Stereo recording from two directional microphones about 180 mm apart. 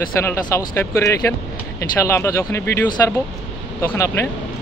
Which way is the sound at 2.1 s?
15° left (ahead or behind).